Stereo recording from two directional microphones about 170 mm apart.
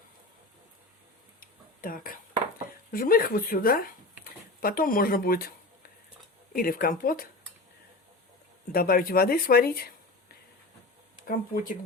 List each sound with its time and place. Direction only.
1.4 s a sound: 55° left (ahead or behind)
2.9 s speech: 60° left (ahead or behind)
8.7 s speech: 60° left (ahead or behind)
11.3 s speech: 55° left (ahead or behind)